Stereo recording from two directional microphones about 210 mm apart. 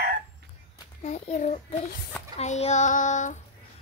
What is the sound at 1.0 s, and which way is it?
Child singing, 35° left (ahead or behind).